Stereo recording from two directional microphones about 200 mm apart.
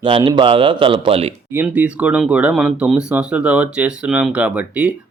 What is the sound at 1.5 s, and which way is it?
Speech, 10° right (ahead or behind).